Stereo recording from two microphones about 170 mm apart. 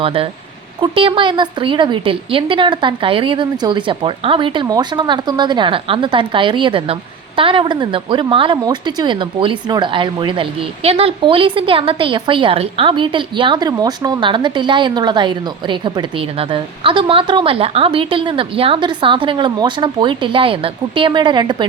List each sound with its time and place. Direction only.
0.0 s a woman's voice: 35° right (ahead or behind)